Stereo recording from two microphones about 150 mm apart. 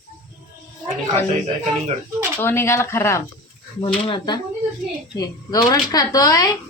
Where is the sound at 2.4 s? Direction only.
15° left (ahead or behind).